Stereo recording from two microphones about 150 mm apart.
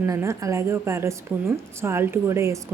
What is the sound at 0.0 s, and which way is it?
A woman's voice, 20° right (ahead or behind).